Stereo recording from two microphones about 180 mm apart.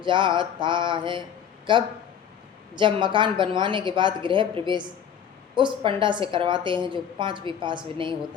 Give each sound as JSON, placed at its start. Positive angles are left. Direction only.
{"t": 0.0, "sound": "a woman's voice", "side_deg": -25}